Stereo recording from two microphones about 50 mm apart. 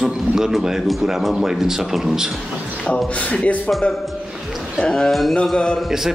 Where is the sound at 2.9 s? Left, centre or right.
Left.